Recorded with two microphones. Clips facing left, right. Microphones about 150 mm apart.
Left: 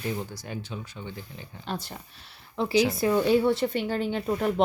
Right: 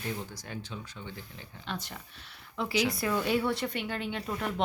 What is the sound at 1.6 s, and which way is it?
Speech, 35° left (ahead or behind).